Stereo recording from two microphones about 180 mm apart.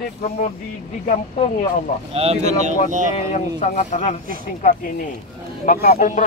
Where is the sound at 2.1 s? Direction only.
35° right (ahead or behind).